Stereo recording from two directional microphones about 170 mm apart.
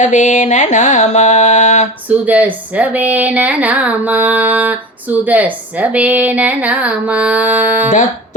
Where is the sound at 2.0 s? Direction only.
10° right (ahead or behind).